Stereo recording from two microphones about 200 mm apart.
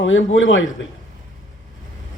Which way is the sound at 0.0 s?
70° left (ahead or behind).